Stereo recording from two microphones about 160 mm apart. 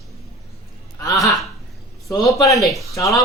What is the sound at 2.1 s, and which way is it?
Speech, 20° left (ahead or behind).